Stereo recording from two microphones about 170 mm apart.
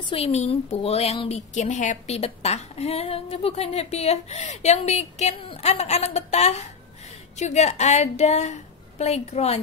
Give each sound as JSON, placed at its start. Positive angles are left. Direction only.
{"t": 0.0, "sound": "a woman's voice", "side_deg": 35}